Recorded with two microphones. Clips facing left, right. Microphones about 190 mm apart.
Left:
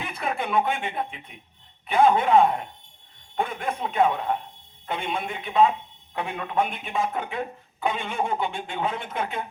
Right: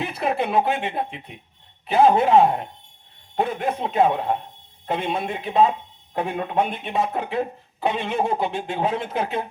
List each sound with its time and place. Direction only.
0.0 s speech: 35° right (ahead or behind)